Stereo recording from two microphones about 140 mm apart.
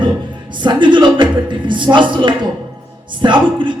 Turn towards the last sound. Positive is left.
turn(degrees=-35)  # may be behind; listen again after turning